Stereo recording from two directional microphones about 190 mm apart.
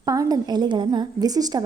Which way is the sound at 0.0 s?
20° right (ahead or behind).